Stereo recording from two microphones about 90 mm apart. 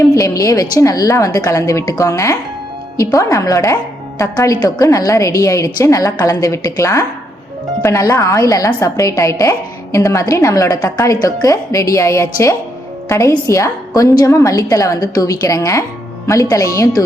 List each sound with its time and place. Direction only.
0.1 s a woman's voice: 40° left (ahead or behind)